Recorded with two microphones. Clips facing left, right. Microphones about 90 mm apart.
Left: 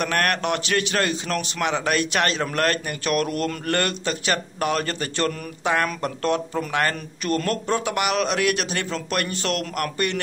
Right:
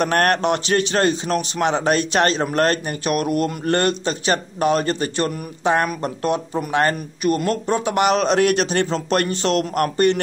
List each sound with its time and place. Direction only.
0.0 s a man's voice: 35° right (ahead or behind)
7.2 s a man's voice: 15° right (ahead or behind)